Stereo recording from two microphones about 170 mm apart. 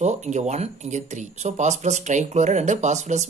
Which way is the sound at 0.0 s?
45° right (ahead or behind).